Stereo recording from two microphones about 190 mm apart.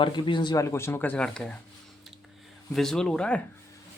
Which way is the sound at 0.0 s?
25° left (ahead or behind).